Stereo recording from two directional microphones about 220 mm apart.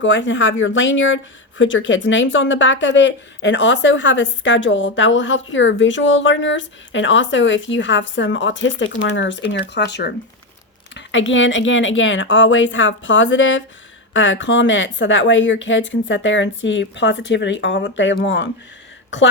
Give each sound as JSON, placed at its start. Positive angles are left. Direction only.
{"t": 0.0, "sound": "speech", "side_deg": 55}